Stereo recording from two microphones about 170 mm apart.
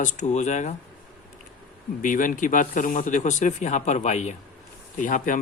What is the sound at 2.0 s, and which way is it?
Speech, 50° left (ahead or behind).